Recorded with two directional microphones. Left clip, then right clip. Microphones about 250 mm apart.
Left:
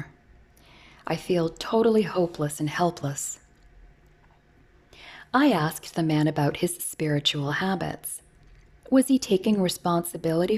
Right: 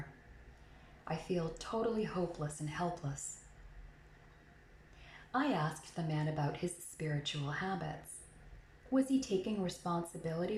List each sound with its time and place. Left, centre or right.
1.0 s speech: left
5.3 s speech: left